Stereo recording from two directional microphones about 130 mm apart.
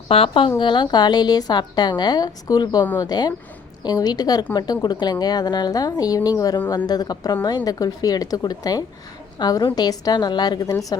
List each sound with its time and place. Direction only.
0.1 s a woman's voice: 45° left (ahead or behind); by 10.9 s 25° left (ahead or behind)